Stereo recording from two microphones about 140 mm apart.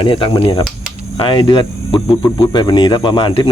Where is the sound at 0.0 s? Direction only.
40° left (ahead or behind).